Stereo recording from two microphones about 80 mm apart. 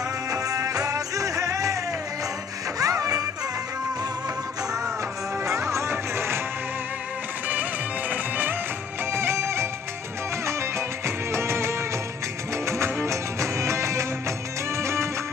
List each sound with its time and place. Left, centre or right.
0.3 s music: right
2.8 s music: right
5.7 s music: right
8.1 s music: right